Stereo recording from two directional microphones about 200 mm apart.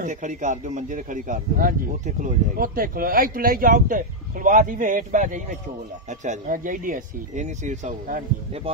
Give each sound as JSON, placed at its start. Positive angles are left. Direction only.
{"t": 0.0, "sound": "speech", "side_deg": -40}